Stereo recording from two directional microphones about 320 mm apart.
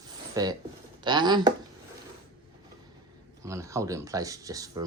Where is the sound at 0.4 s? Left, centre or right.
Centre.